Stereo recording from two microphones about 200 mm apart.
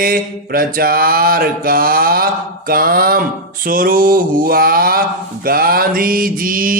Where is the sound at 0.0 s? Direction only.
45° right (ahead or behind).